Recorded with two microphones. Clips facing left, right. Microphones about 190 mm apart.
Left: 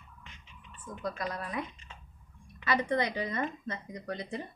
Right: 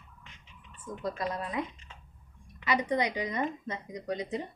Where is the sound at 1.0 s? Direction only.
25° right (ahead or behind).